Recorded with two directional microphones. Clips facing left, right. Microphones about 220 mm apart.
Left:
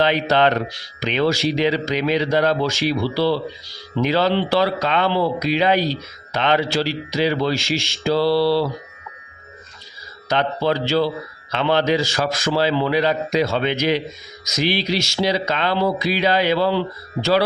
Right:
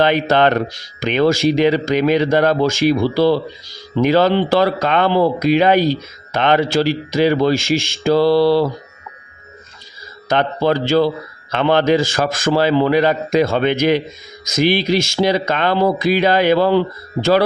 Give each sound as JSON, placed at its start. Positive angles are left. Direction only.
{"t": 0.0, "sound": "speech", "side_deg": -50}
{"t": 10.2, "sound": "speech", "side_deg": -50}